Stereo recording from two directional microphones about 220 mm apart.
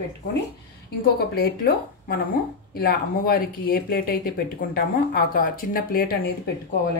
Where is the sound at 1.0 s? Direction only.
45° left (ahead or behind).